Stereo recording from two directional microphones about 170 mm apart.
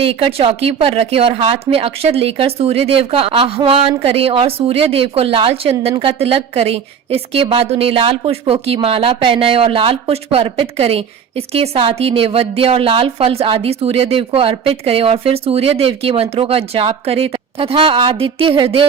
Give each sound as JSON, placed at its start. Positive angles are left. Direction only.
{"t": 0.0, "sound": "speech", "side_deg": -35}